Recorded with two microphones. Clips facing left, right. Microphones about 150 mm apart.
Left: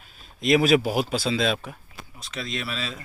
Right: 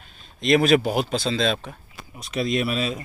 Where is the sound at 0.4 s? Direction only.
5° left (ahead or behind).